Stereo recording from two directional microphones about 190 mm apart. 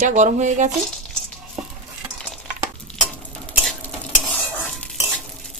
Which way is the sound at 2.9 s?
5° left (ahead or behind).